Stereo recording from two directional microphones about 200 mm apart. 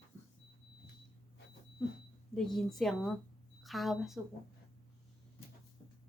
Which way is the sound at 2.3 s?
Centre (ahead or behind).